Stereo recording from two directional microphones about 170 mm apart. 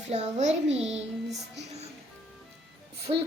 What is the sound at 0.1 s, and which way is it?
Speech, 40° right (ahead or behind).